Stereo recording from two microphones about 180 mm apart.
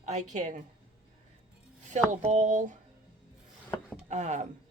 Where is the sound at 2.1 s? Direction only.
40° right (ahead or behind).